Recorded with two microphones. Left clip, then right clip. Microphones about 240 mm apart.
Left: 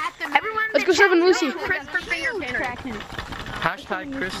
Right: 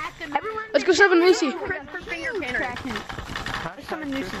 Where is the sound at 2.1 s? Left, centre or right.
Centre.